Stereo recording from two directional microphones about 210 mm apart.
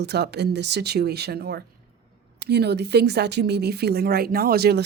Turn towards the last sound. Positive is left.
turn(degrees=-50)  # may be behind; listen again after turning